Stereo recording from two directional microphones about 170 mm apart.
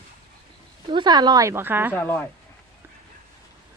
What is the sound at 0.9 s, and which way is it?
Speech, 25° right (ahead or behind).